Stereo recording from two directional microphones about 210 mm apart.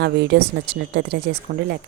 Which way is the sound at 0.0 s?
50° right (ahead or behind).